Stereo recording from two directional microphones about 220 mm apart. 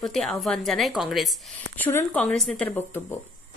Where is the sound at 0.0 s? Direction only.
Centre (ahead or behind).